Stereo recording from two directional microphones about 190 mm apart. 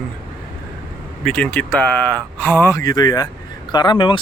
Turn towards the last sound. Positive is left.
turn(degrees=25)  # may be behind; listen again after turning